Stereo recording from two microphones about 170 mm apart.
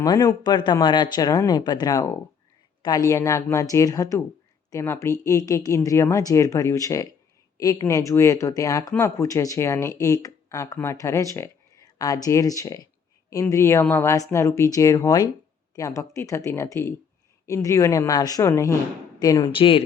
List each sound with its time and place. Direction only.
0.0 s speech: 20° left (ahead or behind)